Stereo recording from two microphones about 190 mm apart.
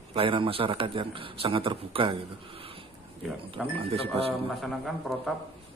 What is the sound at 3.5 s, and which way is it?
Speech, 30° right (ahead or behind).